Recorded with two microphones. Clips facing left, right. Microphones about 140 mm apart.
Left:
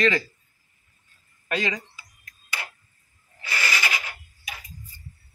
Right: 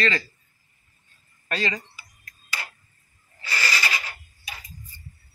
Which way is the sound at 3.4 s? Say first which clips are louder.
Even; 15° left (ahead or behind).